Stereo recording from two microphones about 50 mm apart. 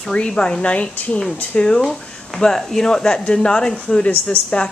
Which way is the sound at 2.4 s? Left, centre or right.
Centre.